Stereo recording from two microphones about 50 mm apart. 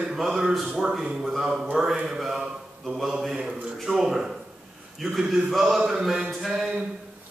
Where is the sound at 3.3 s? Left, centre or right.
Centre.